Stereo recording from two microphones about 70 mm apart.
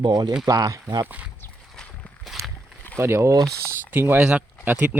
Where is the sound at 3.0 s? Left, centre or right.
Right.